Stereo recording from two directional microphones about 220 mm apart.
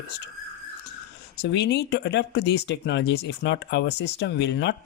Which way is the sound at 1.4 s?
50° left (ahead or behind).